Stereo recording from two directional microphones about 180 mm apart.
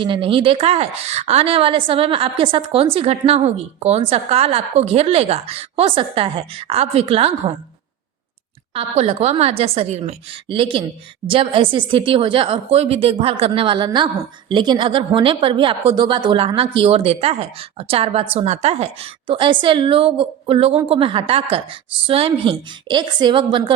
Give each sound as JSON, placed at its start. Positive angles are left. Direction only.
{"t": 0.0, "sound": "speech", "side_deg": -30}
{"t": 8.7, "sound": "speech", "side_deg": -35}